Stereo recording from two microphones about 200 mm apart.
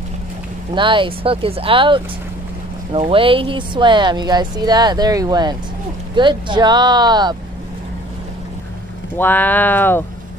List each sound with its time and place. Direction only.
0.7 s speech: 25° right (ahead or behind)
9.2 s speech: 10° left (ahead or behind)